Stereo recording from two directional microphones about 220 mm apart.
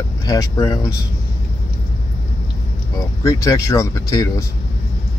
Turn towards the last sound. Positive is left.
turn(degrees=15)  # may be behind; listen again after turning